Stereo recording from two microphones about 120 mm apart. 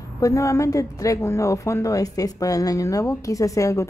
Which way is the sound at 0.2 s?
25° left (ahead or behind).